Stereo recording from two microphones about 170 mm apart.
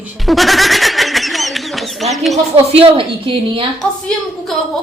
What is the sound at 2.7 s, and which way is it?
Speech, 30° right (ahead or behind).